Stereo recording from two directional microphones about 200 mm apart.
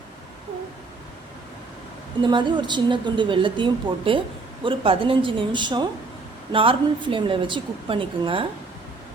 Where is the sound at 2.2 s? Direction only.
25° right (ahead or behind).